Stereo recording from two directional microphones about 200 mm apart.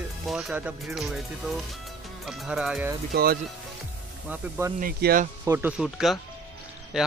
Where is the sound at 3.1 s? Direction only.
50° right (ahead or behind).